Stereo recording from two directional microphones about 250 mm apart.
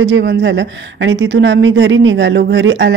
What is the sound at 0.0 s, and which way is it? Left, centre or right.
Speech, right.